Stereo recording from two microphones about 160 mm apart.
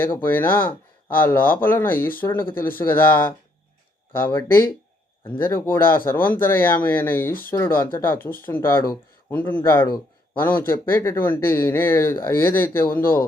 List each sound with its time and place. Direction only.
0.3 s speech: 15° left (ahead or behind)